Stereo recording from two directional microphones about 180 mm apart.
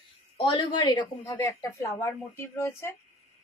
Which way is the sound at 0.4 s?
25° left (ahead or behind).